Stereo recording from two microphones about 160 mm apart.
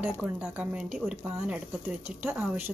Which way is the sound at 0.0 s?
10° right (ahead or behind).